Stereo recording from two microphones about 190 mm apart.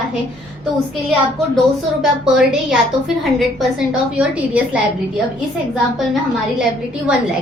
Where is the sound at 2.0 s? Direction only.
5° right (ahead or behind).